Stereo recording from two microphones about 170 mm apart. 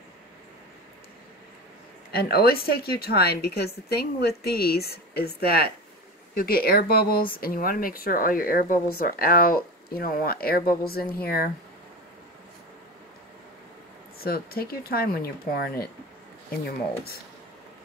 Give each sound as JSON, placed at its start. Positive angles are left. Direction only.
{"t": 2.1, "sound": "a woman's voice", "side_deg": 65}
{"t": 14.2, "sound": "speech", "side_deg": 60}